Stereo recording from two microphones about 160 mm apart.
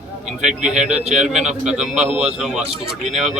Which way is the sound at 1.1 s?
45° right (ahead or behind).